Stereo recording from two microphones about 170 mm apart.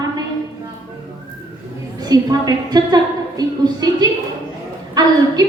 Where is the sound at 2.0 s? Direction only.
20° right (ahead or behind).